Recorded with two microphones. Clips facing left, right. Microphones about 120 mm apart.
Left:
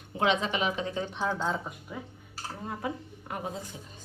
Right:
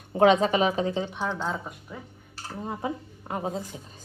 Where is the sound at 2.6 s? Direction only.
25° right (ahead or behind).